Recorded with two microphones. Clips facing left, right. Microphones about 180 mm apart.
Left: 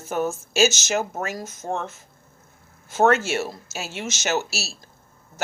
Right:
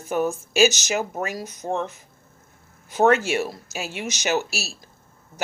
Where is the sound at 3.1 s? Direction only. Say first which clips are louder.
Right 3 dB; 10° right (ahead or behind).